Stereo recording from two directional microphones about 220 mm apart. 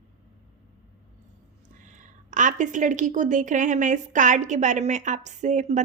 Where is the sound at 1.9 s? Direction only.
35° right (ahead or behind).